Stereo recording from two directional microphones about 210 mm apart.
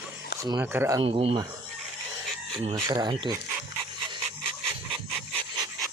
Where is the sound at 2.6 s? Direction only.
20° right (ahead or behind).